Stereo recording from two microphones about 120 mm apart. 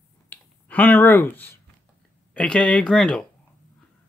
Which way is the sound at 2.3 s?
10° left (ahead or behind).